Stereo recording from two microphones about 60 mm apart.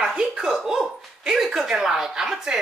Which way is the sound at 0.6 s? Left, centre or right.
Centre.